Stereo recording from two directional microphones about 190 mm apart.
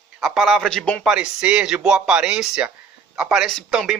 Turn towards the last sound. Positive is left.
turn(degrees=0)  # may be behind; listen again after turning